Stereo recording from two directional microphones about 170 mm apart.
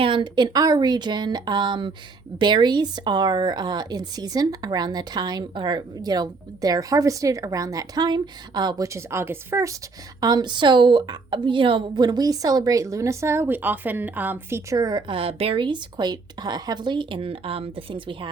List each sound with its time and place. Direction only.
0.0 s a woman's voice: 30° right (ahead or behind)